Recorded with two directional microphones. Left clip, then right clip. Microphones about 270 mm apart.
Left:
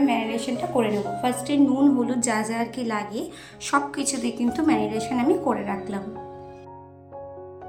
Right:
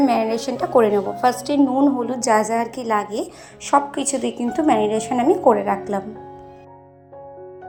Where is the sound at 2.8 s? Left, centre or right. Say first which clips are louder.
Right 7 dB; right.